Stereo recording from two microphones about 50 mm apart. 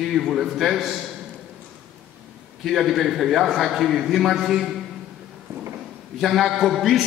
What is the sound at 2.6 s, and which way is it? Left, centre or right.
A man's voice, centre.